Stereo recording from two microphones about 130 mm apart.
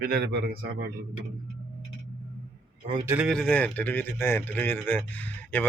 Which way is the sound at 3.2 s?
5° left (ahead or behind).